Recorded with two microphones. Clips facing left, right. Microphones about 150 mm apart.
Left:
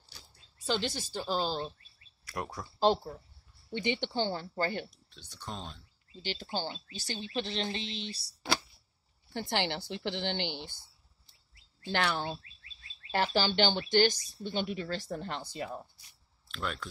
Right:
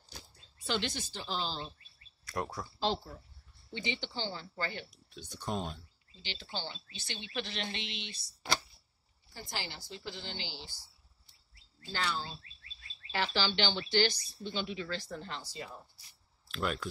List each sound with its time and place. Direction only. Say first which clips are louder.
0.7 s speech: left 3 dB; 35° left (ahead or behind)
2.3 s speech: right 1 dB; 10° left (ahead or behind)
3.7 s speech: left 7 dB; 55° left (ahead or behind)
4.9 s speech: right 7 dB; 15° right (ahead or behind)
6.2 s speech: left 6 dB; 45° left (ahead or behind)
9.3 s speech: left 10 dB; 70° left (ahead or behind)
11.8 s speech: left 5 dB; 70° left (ahead or behind)
13.1 s speech: left 4 dB; 50° left (ahead or behind)
16.4 s speech: right 3 dB; 5° right (ahead or behind)